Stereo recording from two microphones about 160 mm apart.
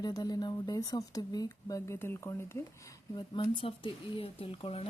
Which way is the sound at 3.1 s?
30° left (ahead or behind).